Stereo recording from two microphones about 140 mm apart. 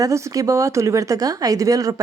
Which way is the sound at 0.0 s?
25° right (ahead or behind).